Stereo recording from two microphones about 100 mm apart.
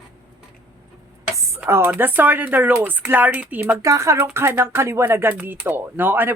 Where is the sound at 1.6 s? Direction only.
20° right (ahead or behind).